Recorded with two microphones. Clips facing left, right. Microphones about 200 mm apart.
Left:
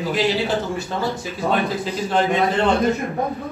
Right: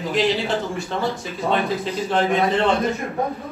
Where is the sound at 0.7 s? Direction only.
Centre (ahead or behind).